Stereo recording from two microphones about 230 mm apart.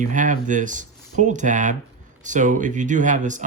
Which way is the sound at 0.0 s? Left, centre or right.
Right.